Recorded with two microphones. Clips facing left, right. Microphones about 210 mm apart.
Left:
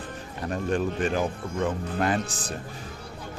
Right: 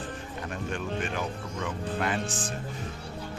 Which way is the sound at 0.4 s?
35° left (ahead or behind).